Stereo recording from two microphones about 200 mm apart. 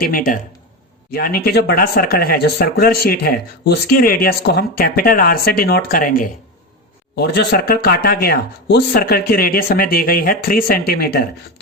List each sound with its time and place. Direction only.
0.0 s speech: 45° left (ahead or behind)